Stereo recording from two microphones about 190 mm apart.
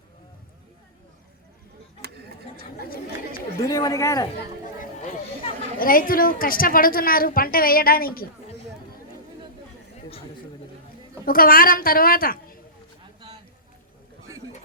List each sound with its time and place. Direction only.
2.0 s a sound: 55° right (ahead or behind)
3.7 s speech: 20° left (ahead or behind)
5.8 s a woman's voice: 50° left (ahead or behind)
11.3 s a woman's voice: 50° left (ahead or behind)